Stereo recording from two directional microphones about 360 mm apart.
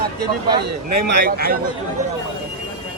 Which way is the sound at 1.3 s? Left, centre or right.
Right.